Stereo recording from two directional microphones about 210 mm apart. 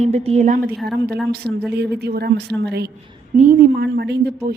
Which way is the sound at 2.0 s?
50° right (ahead or behind).